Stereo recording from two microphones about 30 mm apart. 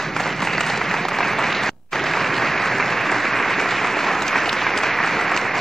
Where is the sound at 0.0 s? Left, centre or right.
Centre.